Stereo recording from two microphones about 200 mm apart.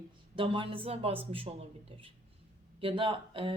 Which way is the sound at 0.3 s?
25° right (ahead or behind).